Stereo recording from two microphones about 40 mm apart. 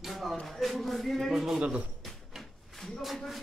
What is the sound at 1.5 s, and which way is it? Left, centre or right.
Speech, right.